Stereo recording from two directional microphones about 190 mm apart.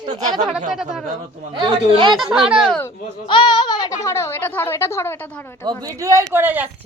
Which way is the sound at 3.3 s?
25° left (ahead or behind).